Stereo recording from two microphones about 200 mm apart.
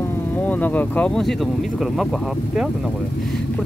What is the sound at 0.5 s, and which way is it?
Speech, 10° left (ahead or behind).